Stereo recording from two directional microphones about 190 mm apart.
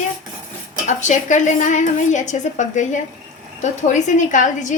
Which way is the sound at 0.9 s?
40° left (ahead or behind).